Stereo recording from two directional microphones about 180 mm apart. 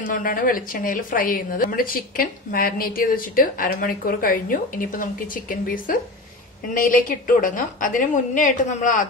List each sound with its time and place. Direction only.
0.0 s speech: 50° left (ahead or behind)